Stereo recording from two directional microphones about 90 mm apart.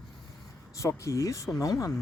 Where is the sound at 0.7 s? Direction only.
35° left (ahead or behind).